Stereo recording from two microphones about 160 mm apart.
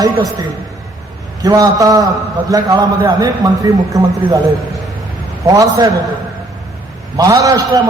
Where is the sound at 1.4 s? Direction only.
20° right (ahead or behind).